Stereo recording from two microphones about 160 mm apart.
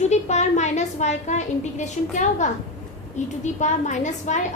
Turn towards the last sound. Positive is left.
turn(degrees=50)  # may be behind; listen again after turning